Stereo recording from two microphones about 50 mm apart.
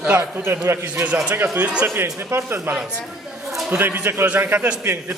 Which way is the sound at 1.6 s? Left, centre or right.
Right.